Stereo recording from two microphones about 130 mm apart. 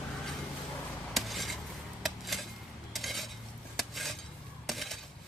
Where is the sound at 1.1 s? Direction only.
Centre (ahead or behind).